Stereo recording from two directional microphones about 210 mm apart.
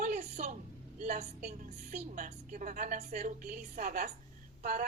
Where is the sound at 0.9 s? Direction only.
35° right (ahead or behind).